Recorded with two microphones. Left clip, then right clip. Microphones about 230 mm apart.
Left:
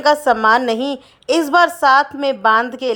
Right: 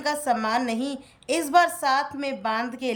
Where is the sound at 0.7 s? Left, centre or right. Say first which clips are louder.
Left 10 dB; centre.